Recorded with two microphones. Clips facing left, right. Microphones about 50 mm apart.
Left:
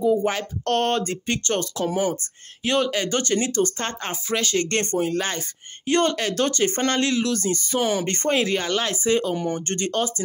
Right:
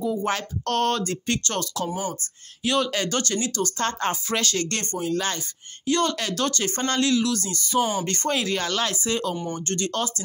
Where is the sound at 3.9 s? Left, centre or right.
Centre.